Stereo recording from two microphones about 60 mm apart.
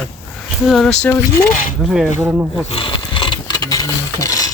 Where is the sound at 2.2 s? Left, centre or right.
Right.